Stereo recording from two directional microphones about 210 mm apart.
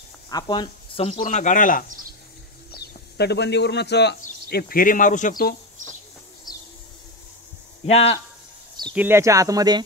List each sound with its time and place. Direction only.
0.3 s speech: 20° left (ahead or behind)
1.2 s speech: 35° left (ahead or behind)
2.7 s speech: 50° left (ahead or behind)
6.5 s a sound: centre (ahead or behind)
7.8 s speech: 30° left (ahead or behind)
8.9 s speech: 10° right (ahead or behind)